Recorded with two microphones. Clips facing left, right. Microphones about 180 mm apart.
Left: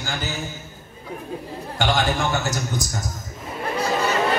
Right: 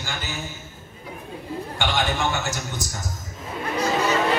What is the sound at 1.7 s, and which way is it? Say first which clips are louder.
Speech: left 4 dB; 35° left (ahead or behind).